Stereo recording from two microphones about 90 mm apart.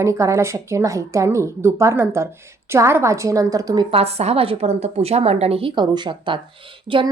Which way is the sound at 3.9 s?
90° right.